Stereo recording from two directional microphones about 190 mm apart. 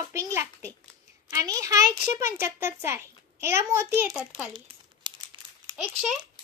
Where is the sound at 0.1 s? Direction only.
15° right (ahead or behind).